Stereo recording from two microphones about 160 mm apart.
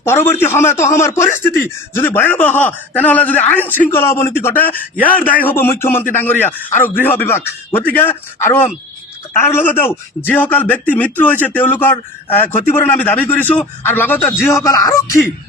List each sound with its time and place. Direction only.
0.0 s speech: 15° left (ahead or behind)